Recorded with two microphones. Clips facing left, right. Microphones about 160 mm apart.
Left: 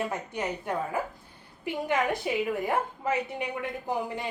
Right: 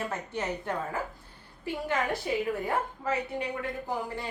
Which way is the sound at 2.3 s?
15° left (ahead or behind).